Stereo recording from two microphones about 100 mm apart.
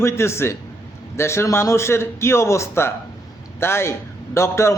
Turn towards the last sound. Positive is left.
turn(degrees=25)  # may be behind; listen again after turning